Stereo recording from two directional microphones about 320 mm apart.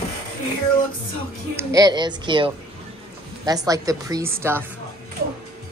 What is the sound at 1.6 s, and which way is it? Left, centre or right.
A woman's voice, centre.